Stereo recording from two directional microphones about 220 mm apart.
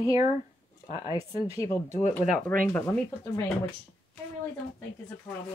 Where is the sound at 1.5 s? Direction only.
15° left (ahead or behind).